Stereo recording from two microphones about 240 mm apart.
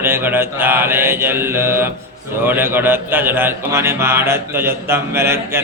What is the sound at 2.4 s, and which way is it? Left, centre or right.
Speech, centre.